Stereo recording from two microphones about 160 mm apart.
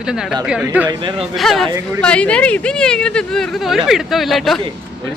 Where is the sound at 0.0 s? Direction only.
5° right (ahead or behind).